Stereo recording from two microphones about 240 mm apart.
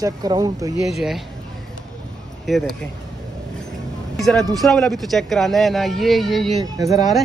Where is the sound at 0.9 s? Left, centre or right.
Centre.